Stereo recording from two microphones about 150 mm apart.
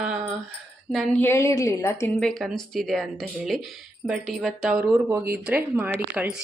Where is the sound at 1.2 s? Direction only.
20° left (ahead or behind).